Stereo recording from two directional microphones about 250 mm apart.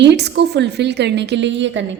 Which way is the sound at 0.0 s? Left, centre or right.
Right.